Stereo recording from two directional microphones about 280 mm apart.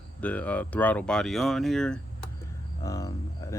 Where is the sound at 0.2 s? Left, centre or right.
Centre.